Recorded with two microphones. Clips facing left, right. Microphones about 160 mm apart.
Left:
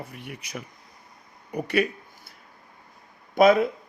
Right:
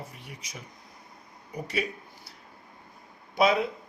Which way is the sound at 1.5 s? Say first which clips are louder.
Left 7 dB; 60° left (ahead or behind).